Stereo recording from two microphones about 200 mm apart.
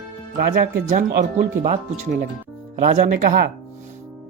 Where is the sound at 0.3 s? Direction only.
45° right (ahead or behind).